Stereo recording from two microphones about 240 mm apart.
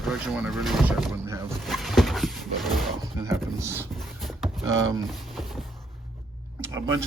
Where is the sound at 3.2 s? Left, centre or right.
Centre.